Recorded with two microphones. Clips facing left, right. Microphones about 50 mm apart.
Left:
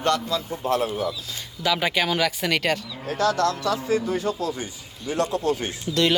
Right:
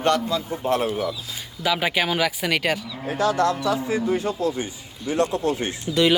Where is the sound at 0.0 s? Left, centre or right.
Right.